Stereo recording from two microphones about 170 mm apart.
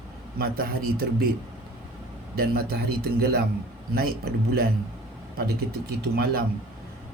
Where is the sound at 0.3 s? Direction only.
60° right (ahead or behind).